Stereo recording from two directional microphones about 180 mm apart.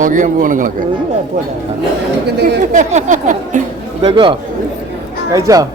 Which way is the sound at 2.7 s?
40° right (ahead or behind).